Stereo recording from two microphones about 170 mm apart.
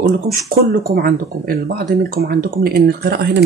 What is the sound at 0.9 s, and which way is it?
Speech, 60° right (ahead or behind).